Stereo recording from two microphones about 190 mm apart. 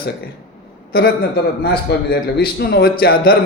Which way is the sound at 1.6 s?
55° left (ahead or behind).